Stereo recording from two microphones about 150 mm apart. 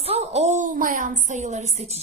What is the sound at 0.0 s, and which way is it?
A woman's voice, 45° right (ahead or behind).